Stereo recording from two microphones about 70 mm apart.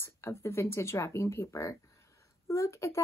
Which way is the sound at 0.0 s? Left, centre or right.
Left.